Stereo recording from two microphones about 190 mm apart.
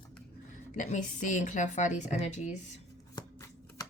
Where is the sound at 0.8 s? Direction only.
40° left (ahead or behind).